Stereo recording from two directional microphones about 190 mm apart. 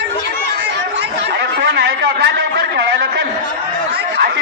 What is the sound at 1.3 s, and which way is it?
Chatter, 60° right (ahead or behind).